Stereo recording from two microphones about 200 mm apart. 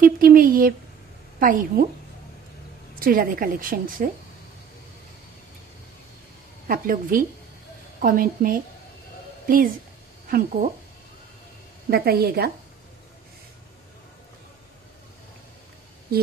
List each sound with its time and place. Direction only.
0.0 s a woman's voice: 45° right (ahead or behind)
3.0 s a woman's voice: 45° right (ahead or behind)
6.7 s a woman's voice: 45° right (ahead or behind)
10.3 s a woman's voice: 45° right (ahead or behind)
11.9 s a woman's voice: 50° right (ahead or behind)